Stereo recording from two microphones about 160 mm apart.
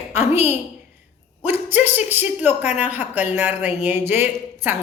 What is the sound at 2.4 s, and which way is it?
Speech, 45° left (ahead or behind).